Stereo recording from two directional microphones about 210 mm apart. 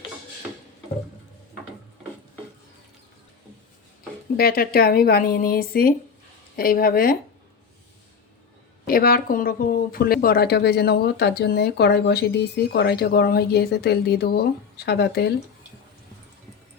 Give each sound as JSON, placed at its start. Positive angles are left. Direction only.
{"t": 4.4, "sound": "speech", "side_deg": 45}
{"t": 8.9, "sound": "speech", "side_deg": 45}